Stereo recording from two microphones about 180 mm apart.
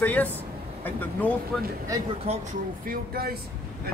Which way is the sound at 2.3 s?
35° right (ahead or behind).